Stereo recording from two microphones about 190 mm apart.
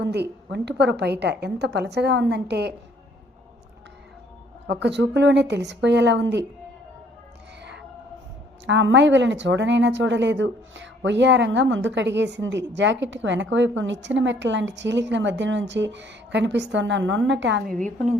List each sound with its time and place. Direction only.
0.0 s a woman's voice: 65° right (ahead or behind)
4.6 s a woman's voice: 65° right (ahead or behind)
8.6 s speech: 75° right (ahead or behind)